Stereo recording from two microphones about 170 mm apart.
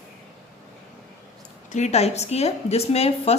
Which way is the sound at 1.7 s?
40° left (ahead or behind).